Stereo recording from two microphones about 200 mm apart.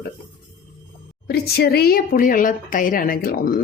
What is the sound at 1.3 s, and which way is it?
A woman's voice, 55° left (ahead or behind).